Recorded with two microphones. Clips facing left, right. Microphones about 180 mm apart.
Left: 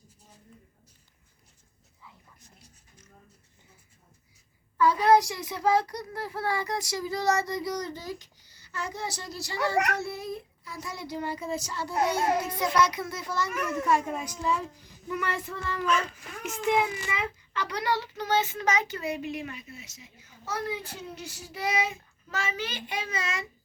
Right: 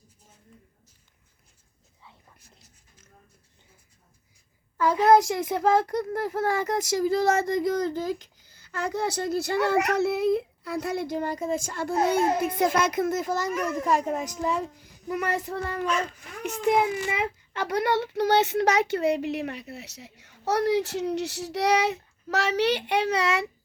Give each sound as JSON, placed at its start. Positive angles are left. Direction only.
{"t": 4.8, "sound": "a child's voice", "side_deg": -45}
{"t": 10.0, "sound": "a child's voice", "side_deg": -65}